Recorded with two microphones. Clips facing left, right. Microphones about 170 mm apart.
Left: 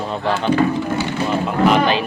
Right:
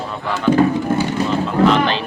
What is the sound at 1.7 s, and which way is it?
Speech, 10° left (ahead or behind).